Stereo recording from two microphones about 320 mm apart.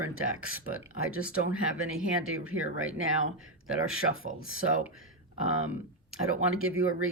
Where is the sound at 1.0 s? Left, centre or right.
Right.